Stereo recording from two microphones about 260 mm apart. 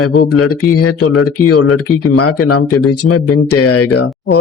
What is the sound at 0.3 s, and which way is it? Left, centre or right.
Speech, left.